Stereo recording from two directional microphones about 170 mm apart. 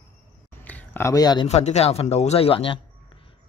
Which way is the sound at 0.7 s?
10° left (ahead or behind).